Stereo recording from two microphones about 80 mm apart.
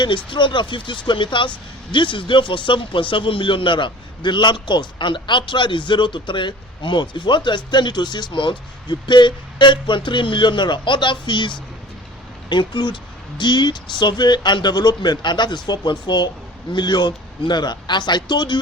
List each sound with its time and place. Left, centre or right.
0.3 s a man's voice: left